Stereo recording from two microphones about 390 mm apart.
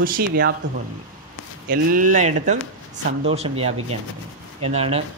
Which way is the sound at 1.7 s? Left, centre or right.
Right.